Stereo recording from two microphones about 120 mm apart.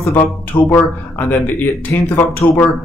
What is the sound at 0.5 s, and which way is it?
Speech, 35° left (ahead or behind).